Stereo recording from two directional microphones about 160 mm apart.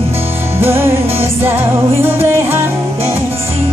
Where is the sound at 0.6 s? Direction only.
15° right (ahead or behind).